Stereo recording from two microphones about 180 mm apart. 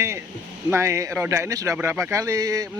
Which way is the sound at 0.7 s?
15° right (ahead or behind).